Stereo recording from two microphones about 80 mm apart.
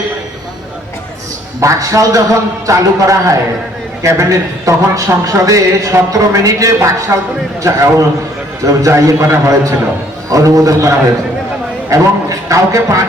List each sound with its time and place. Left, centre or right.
1.6 s a man's voice: right